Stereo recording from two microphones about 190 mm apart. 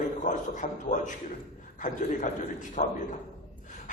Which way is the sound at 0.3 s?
40° left (ahead or behind).